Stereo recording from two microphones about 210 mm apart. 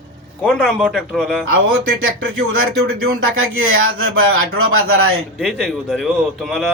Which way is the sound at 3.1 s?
75° right (ahead or behind).